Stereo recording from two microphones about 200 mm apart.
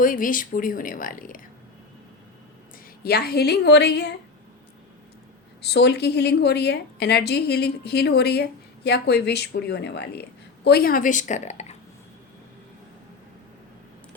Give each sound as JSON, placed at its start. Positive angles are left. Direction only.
{"t": 0.0, "sound": "speech", "side_deg": 45}
{"t": 3.0, "sound": "a woman's voice", "side_deg": 50}
{"t": 5.6, "sound": "a woman's voice", "side_deg": 55}